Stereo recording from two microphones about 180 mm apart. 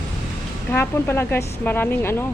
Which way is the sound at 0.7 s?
15° left (ahead or behind).